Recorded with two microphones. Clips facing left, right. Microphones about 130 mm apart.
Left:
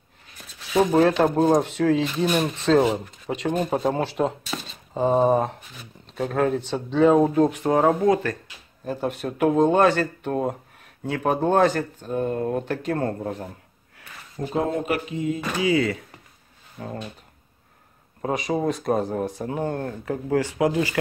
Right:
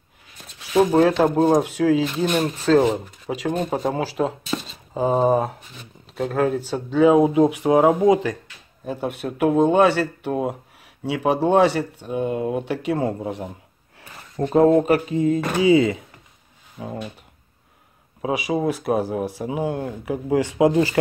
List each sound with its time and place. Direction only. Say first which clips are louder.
1.2 s speech: right 2 dB; 5° right (ahead or behind)
8.8 s speech: even; centre (ahead or behind)
14.4 s speech: right 6 dB; 45° right (ahead or behind)
14.7 s mantra: right 8 dB; 35° right (ahead or behind)
15.6 s speech: right 5 dB; 25° right (ahead or behind)
16.7 s speech: right 2 dB; 5° right (ahead or behind)
18.2 s speech: right 2 dB; 5° right (ahead or behind); by 21.0 s 25° right (ahead or behind)